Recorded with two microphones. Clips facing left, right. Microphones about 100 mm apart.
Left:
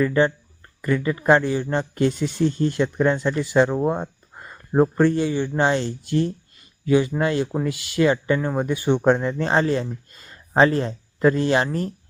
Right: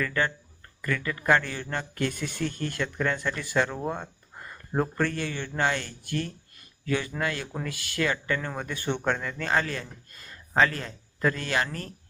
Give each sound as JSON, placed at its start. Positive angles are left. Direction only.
{"t": 0.0, "sound": "a man's voice", "side_deg": 20}